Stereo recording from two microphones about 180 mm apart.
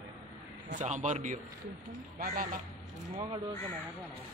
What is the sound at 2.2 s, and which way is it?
Speech, 55° right (ahead or behind).